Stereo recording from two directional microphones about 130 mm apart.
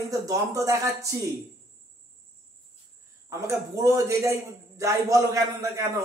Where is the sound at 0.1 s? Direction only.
25° right (ahead or behind).